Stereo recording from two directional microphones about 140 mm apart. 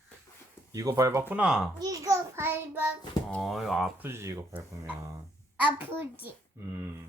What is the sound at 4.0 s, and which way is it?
A child's voice, 20° right (ahead or behind).